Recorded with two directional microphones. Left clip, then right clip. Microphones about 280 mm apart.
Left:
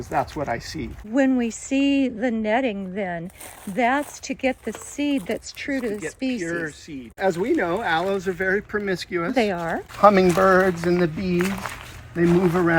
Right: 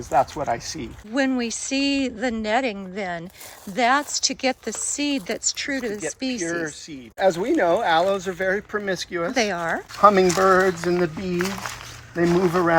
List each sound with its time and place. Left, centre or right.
0.1 s speech: centre
1.1 s speech: centre
6.4 s speech: right
9.3 s speech: centre